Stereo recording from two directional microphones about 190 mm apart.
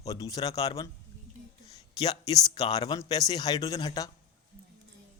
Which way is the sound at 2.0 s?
20° left (ahead or behind).